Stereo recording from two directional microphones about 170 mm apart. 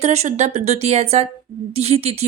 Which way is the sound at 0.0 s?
40° right (ahead or behind).